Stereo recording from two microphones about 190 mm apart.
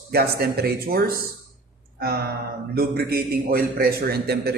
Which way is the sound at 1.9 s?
55° right (ahead or behind).